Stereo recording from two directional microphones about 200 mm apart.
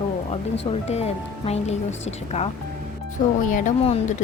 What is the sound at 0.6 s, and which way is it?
Speech, 30° left (ahead or behind).